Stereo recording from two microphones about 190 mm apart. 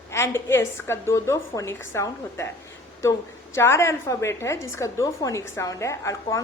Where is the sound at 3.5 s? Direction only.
15° left (ahead or behind).